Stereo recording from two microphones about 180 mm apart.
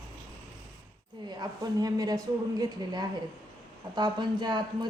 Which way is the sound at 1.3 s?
20° right (ahead or behind).